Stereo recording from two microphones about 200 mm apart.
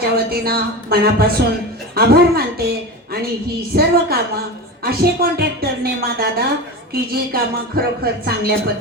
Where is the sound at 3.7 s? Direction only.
50° right (ahead or behind).